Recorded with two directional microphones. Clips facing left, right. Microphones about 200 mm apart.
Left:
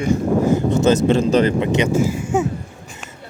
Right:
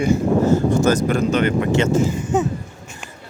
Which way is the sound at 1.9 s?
10° left (ahead or behind).